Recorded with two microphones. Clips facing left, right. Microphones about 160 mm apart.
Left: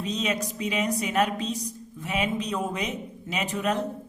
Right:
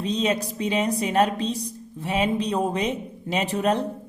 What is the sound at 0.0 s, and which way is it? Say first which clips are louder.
Speech: right 4 dB; 30° right (ahead or behind).